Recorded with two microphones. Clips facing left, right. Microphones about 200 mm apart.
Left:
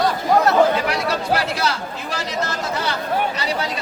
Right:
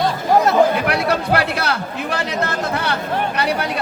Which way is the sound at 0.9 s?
60° right (ahead or behind).